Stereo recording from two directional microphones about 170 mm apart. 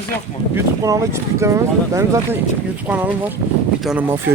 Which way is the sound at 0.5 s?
20° right (ahead or behind).